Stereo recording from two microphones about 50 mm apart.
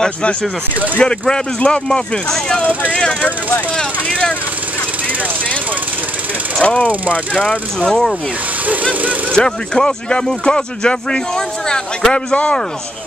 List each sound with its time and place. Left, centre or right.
0.0 s speech: left
6.6 s speech: left
7.4 s speech: centre
9.3 s speech: centre